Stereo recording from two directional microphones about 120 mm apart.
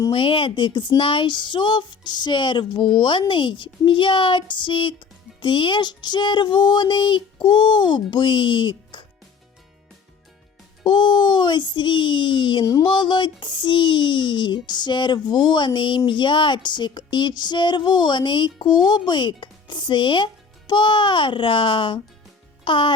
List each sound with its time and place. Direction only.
0.1 s speech: 45° left (ahead or behind)
10.8 s a child's voice: 40° left (ahead or behind)